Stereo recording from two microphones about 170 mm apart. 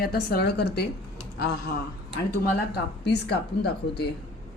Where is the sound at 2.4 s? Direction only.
75° left (ahead or behind).